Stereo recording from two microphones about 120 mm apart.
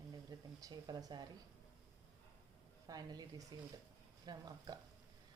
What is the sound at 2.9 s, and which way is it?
Speech, 35° right (ahead or behind).